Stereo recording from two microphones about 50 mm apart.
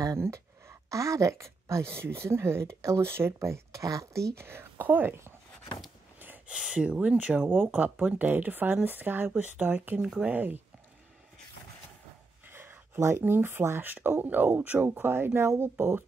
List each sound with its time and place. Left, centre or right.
0.1 s speech: right
4.5 s speech: right
6.1 s a sound: right
6.4 s speech: centre
7.4 s speech: right
9.3 s speech: right
10.3 s speech: right
12.4 s a sound: right
13.2 s speech: right
14.9 s speech: right